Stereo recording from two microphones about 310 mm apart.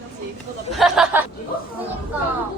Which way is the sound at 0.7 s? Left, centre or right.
Centre.